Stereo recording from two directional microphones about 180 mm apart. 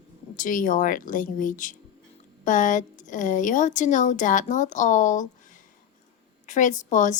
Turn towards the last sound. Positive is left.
turn(degrees=45)  # may be behind; listen again after turning